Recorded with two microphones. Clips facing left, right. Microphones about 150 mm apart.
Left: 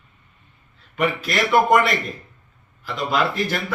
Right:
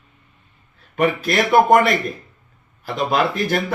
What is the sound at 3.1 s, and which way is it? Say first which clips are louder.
Speech: right 2 dB; 45° right (ahead or behind).